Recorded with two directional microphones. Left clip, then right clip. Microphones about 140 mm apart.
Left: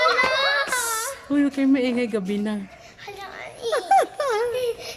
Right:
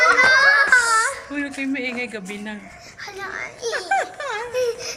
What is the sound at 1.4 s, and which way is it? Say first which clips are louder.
Speech: left 10 dB; 40° left (ahead or behind).